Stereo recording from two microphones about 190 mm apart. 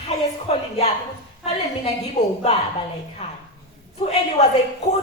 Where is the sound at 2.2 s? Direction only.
35° left (ahead or behind).